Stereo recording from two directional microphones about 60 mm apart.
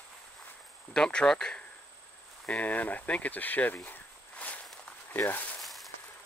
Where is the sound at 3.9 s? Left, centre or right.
Left.